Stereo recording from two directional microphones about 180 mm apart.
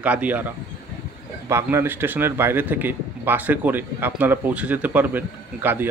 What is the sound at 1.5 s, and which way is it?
A man's voice, 15° right (ahead or behind).